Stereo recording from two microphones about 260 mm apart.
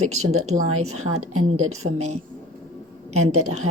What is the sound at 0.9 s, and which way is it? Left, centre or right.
Speech, right.